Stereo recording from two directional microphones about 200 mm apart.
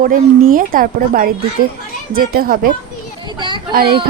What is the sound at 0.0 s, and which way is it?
Speech, 45° right (ahead or behind).